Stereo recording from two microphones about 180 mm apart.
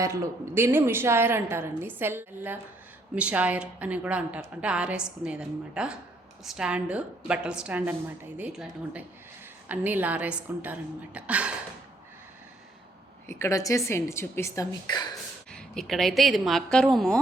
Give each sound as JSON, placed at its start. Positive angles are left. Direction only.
{"t": 0.0, "sound": "a woman's voice", "side_deg": -15}
{"t": 13.2, "sound": "a woman's voice", "side_deg": 15}
{"t": 15.5, "sound": "a woman's voice", "side_deg": 5}